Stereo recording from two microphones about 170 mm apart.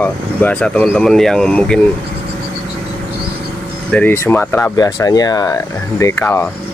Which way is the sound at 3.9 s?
10° left (ahead or behind).